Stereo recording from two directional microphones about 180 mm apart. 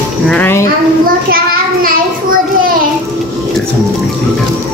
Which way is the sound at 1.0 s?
50° right (ahead or behind).